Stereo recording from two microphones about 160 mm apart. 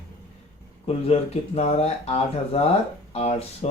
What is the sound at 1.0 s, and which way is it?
Speech, 40° left (ahead or behind).